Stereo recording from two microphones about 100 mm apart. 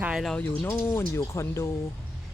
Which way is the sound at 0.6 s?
25° left (ahead or behind).